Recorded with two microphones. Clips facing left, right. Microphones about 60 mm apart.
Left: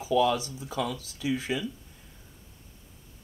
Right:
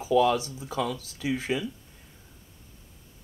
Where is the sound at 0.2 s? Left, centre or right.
Right.